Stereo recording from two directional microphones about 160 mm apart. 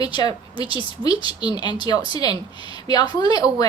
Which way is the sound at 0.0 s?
25° left (ahead or behind).